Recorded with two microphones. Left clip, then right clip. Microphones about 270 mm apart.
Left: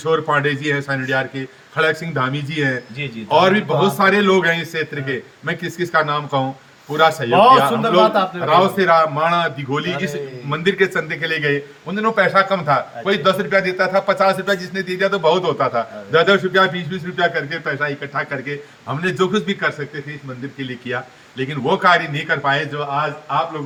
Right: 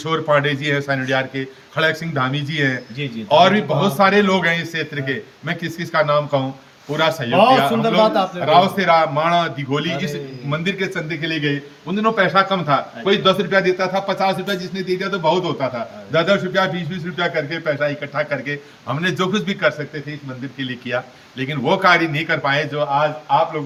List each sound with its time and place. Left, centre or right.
0.0 s a man's voice: centre
20.9 s a man's voice: centre